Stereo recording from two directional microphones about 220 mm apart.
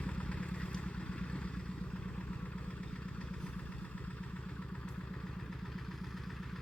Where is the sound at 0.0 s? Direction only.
5° left (ahead or behind).